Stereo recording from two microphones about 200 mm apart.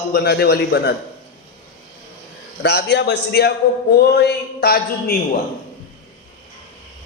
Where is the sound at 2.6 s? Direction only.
55° left (ahead or behind).